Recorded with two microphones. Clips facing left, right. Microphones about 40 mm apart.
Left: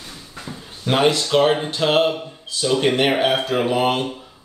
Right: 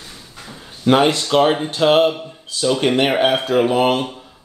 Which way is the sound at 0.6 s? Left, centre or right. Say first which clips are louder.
Right 6 dB; centre.